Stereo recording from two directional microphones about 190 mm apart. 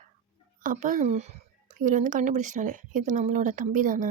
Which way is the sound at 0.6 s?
45° right (ahead or behind).